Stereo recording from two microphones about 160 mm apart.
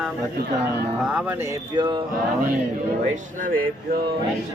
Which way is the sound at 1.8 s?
30° right (ahead or behind).